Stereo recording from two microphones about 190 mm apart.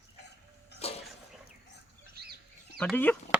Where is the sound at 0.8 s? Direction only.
30° left (ahead or behind).